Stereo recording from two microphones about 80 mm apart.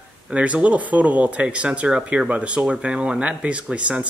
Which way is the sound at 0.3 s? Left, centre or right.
Centre.